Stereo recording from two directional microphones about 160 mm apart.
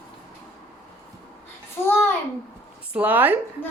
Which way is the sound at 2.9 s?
10° right (ahead or behind).